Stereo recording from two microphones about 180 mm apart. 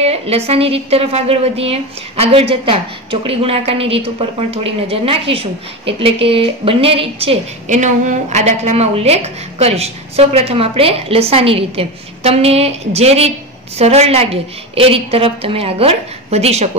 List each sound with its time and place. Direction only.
0.0 s a woman's voice: 35° right (ahead or behind)